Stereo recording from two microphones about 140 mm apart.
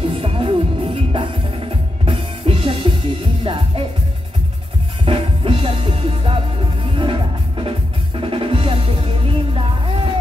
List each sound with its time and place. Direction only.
0.1 s music: 45° right (ahead or behind)
5.0 s music: 40° right (ahead or behind)